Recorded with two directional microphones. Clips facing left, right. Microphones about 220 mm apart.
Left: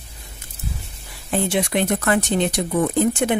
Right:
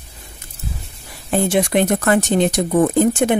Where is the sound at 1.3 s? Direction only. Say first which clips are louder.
Right 4 dB; 45° right (ahead or behind).